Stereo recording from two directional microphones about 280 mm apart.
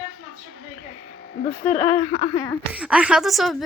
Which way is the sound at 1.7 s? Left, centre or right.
Centre.